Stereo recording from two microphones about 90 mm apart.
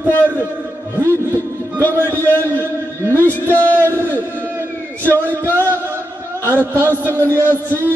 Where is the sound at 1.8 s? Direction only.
20° left (ahead or behind).